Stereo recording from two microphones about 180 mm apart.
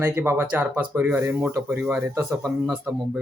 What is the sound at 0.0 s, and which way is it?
Speech, 15° right (ahead or behind).